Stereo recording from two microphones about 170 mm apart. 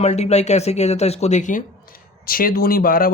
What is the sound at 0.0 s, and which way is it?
Speech, 40° left (ahead or behind).